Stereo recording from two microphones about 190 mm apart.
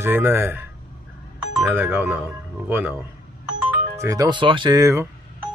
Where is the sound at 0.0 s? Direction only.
10° right (ahead or behind).